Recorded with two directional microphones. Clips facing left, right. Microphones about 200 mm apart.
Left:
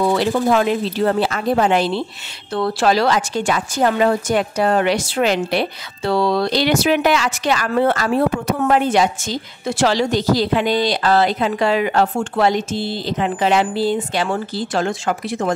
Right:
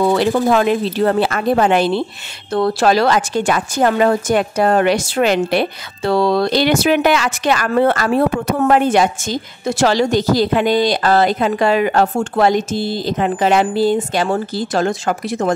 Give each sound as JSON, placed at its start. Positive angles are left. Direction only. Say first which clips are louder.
{"t": 0.1, "sound": "speech", "louder": "right 2 dB", "side_deg": -55}
{"t": 2.5, "sound": "a woman's voice", "louder": "right 3 dB", "side_deg": -45}